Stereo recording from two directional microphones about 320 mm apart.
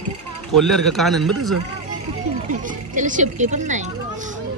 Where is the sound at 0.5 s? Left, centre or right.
Centre.